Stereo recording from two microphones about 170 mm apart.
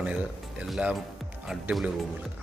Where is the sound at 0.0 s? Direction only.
5° right (ahead or behind).